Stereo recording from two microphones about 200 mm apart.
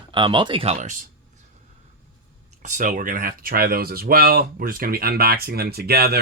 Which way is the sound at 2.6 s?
40° right (ahead or behind).